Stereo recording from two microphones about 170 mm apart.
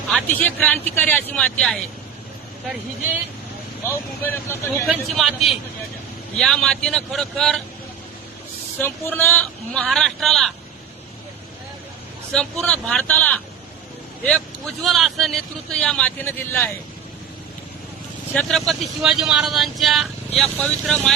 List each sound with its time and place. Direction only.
0.1 s speech: 5° left (ahead or behind)
3.8 s speech: 15° left (ahead or behind)
4.9 s speech: centre (ahead or behind)
8.8 s speech: 10° left (ahead or behind)
12.3 s speech: 5° left (ahead or behind)
14.8 s speech: centre (ahead or behind)
18.3 s speech: 5° left (ahead or behind)